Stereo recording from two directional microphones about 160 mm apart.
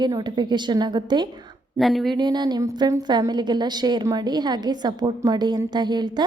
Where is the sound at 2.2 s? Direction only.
25° right (ahead or behind).